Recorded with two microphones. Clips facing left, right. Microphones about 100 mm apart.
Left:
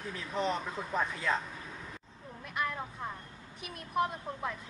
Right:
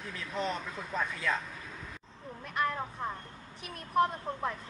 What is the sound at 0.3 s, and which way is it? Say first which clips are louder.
Speech: left 2 dB; 15° left (ahead or behind).